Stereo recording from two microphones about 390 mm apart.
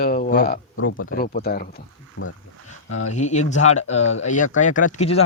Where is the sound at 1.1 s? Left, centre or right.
Left.